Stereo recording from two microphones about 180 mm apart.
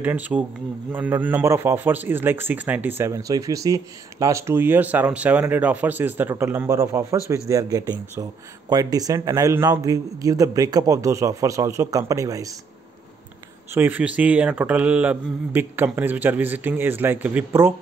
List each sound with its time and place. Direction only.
0.0 s a man's voice: 10° right (ahead or behind)
13.7 s a man's voice: 10° right (ahead or behind)